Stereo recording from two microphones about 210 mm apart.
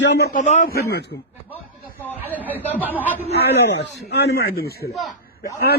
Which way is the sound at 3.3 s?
55° left (ahead or behind).